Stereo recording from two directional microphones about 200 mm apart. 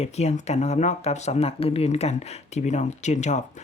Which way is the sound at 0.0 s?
35° left (ahead or behind).